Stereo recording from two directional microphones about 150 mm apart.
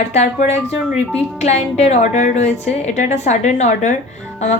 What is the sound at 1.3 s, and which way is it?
A woman's voice, 50° left (ahead or behind).